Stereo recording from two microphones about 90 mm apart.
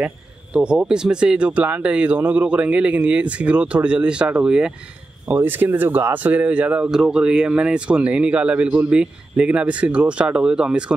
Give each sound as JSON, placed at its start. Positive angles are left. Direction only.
{"t": 0.0, "sound": "speech", "side_deg": -10}
{"t": 5.3, "sound": "speech", "side_deg": -20}